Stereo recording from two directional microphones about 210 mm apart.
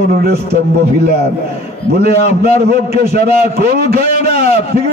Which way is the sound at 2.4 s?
50° right (ahead or behind).